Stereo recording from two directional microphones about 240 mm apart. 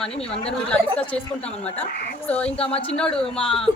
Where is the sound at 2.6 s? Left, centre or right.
Left.